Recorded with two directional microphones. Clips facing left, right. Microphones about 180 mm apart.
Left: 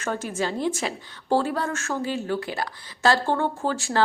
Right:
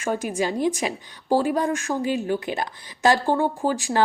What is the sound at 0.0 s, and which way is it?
A woman's voice, 15° right (ahead or behind).